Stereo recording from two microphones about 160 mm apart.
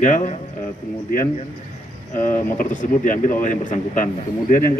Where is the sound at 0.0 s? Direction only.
50° left (ahead or behind).